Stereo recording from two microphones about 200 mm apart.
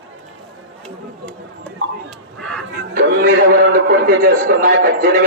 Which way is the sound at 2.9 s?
45° right (ahead or behind).